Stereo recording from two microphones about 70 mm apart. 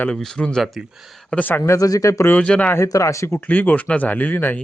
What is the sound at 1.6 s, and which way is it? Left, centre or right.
Speech, left.